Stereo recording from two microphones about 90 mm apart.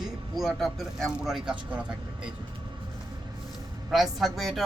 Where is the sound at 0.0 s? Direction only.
Centre (ahead or behind).